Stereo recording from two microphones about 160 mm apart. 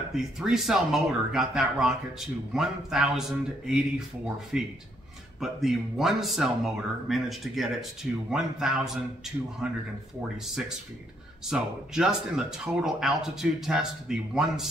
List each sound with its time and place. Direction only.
0.1 s speech: centre (ahead or behind)